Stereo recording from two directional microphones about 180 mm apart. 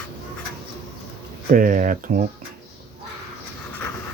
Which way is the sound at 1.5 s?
50° right (ahead or behind).